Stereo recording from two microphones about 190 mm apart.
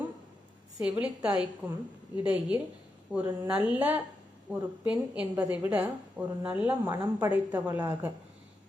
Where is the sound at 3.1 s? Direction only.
5° right (ahead or behind).